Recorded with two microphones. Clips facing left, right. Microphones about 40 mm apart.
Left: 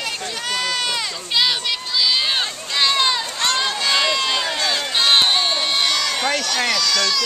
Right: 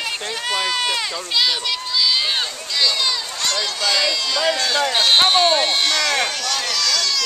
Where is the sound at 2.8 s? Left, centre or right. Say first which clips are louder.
Left 2 dB; left.